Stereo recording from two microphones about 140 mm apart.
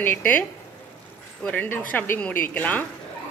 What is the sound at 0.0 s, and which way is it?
Speech, 15° left (ahead or behind).